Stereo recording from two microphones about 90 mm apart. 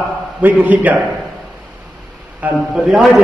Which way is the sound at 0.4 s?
20° right (ahead or behind).